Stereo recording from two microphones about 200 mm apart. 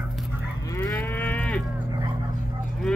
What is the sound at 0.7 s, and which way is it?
Moo, 10° left (ahead or behind).